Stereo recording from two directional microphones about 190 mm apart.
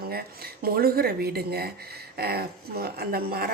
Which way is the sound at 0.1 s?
55° right (ahead or behind).